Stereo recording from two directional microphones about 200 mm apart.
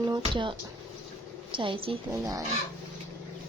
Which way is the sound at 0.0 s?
20° right (ahead or behind).